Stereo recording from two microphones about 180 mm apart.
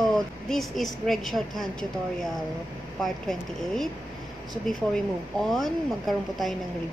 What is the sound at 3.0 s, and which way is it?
Speech, centre (ahead or behind).